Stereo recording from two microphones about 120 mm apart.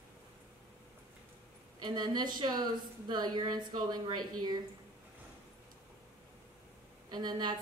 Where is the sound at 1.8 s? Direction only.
40° right (ahead or behind).